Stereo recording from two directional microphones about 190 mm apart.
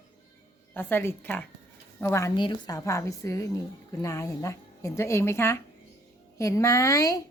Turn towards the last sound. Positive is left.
turn(degrees=20)  # may be behind; listen again after turning